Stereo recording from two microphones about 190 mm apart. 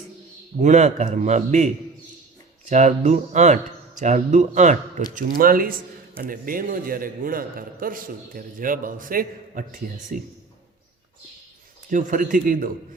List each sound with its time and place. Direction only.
0.6 s a man's voice: 40° right (ahead or behind)
11.9 s a man's voice: 45° right (ahead or behind)